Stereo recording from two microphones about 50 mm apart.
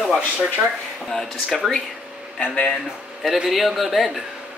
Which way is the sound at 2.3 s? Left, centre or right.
Left.